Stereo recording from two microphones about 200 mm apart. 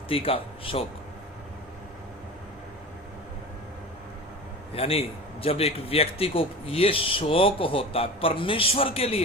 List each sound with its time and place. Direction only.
0.1 s a man's voice: 30° left (ahead or behind)
4.7 s a man's voice: 30° left (ahead or behind)